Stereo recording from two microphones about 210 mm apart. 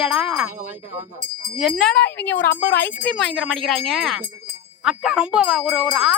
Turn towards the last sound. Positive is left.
turn(degrees=-5)  # may be behind; listen again after turning